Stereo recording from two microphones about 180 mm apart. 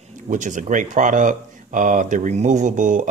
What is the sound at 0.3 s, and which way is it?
Speech, 45° right (ahead or behind).